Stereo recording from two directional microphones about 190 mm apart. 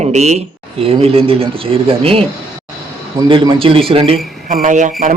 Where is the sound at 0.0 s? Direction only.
35° right (ahead or behind).